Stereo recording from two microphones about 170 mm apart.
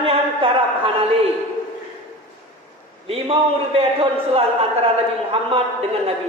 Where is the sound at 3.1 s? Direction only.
35° right (ahead or behind).